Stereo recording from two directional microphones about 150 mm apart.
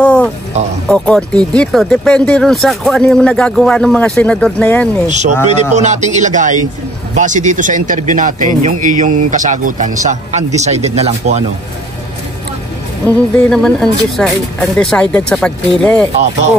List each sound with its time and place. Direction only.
0.0 s music: 5° left (ahead or behind)
0.8 s speech: 5° left (ahead or behind)
5.0 s a man's voice: 50° right (ahead or behind)
13.0 s speech: 5° left (ahead or behind)